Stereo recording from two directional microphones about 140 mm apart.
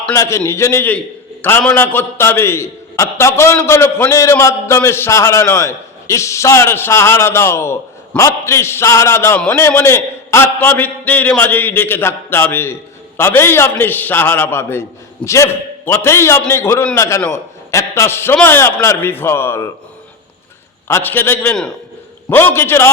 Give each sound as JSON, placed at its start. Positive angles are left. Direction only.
{"t": 0.1, "sound": "a man's voice", "side_deg": 20}
{"t": 20.8, "sound": "a man's voice", "side_deg": 15}